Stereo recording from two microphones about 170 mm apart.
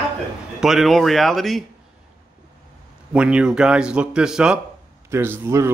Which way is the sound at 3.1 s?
5° right (ahead or behind).